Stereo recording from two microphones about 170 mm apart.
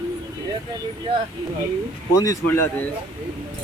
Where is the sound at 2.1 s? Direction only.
20° left (ahead or behind).